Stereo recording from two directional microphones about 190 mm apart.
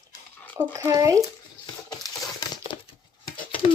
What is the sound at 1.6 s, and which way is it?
Crumpling, 20° left (ahead or behind).